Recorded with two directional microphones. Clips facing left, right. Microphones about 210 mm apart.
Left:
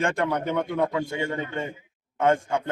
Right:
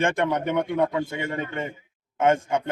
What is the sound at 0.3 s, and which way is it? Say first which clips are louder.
Speech: right 2 dB; 20° right (ahead or behind).